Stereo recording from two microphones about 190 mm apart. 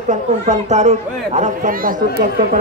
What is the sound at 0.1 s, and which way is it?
Speech, 35° right (ahead or behind).